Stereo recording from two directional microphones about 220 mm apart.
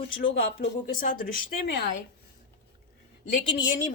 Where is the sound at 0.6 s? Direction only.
40° left (ahead or behind).